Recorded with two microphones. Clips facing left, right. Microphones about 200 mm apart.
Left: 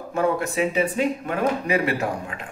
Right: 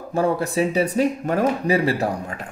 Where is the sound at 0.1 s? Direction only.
35° right (ahead or behind).